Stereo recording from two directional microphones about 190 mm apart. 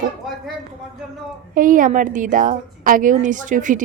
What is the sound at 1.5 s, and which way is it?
A woman's voice, 45° right (ahead or behind).